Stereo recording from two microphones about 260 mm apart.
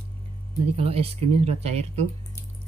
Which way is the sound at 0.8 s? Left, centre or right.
Right.